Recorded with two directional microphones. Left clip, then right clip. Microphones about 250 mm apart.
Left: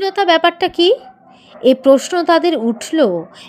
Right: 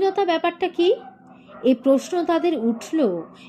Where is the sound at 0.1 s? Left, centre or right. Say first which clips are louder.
Left 9 dB; left.